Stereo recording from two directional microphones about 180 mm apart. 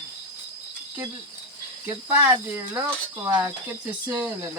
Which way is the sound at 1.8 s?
10° right (ahead or behind).